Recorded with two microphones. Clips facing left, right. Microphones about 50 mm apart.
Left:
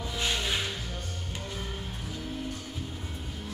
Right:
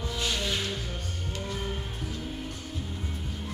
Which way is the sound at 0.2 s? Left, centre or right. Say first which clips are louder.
Left 1 dB; left.